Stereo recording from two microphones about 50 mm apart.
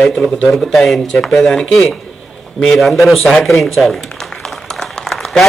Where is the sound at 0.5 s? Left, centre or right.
Centre.